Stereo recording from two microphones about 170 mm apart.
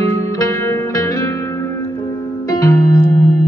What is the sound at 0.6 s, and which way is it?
Music, 15° left (ahead or behind).